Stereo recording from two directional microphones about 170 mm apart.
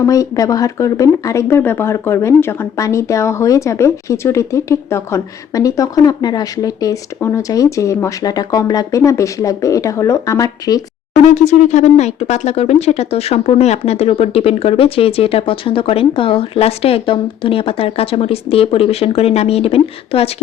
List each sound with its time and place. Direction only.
0.0 s speech: 20° left (ahead or behind)
11.3 s speech: 45° left (ahead or behind)